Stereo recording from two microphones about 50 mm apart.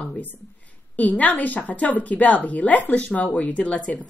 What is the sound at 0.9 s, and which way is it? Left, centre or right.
A woman's voice, left.